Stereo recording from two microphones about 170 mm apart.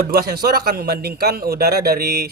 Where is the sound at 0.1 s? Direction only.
65° right (ahead or behind).